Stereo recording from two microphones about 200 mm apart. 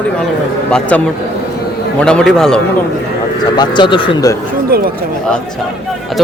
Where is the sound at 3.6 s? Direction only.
25° left (ahead or behind).